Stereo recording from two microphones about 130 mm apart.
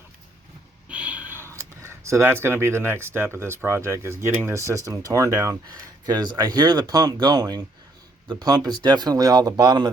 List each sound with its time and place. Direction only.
0.9 s speech: 10° right (ahead or behind); by 9.9 s 30° right (ahead or behind)